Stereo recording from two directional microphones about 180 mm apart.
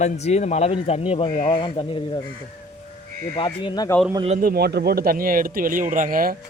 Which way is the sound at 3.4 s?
25° left (ahead or behind).